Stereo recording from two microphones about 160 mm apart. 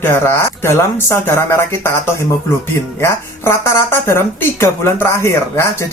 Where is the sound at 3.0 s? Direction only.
15° left (ahead or behind).